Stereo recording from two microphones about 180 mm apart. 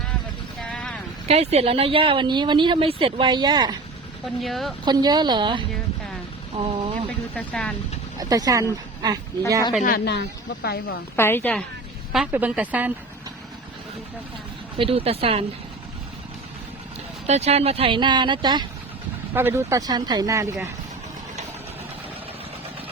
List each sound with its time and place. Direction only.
0.7 s vehicle: 5° left (ahead or behind)
1.3 s speech: 35° right (ahead or behind)
4.4 s speech: centre (ahead or behind)
4.9 s speech: 25° right (ahead or behind)
7.3 s speech: 5° left (ahead or behind)
8.2 s speech: 20° right (ahead or behind)
9.8 s speech: 60° left (ahead or behind)
11.2 s a woman's voice: 10° left (ahead or behind)
12.1 s speech: 5° right (ahead or behind)
14.8 s a woman's voice: 30° right (ahead or behind)
17.2 s speech: 35° right (ahead or behind)
19.3 s speech: 10° right (ahead or behind)